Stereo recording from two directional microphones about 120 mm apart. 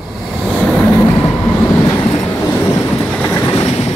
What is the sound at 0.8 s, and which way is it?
Train, 10° left (ahead or behind).